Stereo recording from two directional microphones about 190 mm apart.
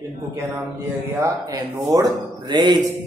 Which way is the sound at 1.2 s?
20° right (ahead or behind).